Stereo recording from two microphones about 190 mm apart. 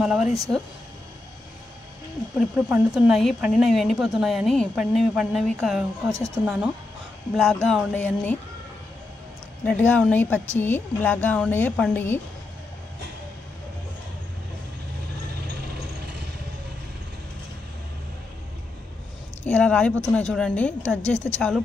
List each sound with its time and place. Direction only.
0.0 s speech: 5° right (ahead or behind)
2.3 s speech: 5° right (ahead or behind)
6.0 s speech: 15° right (ahead or behind)
6.4 s speech: 5° right (ahead or behind)
7.6 s a woman's voice: 5° left (ahead or behind)
9.7 s a woman's voice: 5° left (ahead or behind)
19.4 s speech: 5° left (ahead or behind)